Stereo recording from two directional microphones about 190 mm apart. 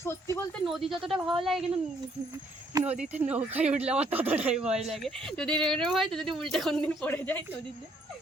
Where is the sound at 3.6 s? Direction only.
35° right (ahead or behind).